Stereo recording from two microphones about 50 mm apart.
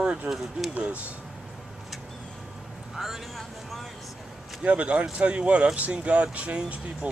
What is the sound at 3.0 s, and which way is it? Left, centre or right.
Speech, centre.